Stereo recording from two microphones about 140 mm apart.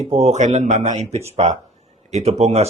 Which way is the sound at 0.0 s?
50° right (ahead or behind).